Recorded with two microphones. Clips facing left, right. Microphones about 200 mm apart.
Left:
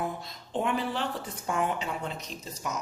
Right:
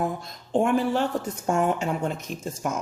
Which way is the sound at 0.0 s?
45° right (ahead or behind).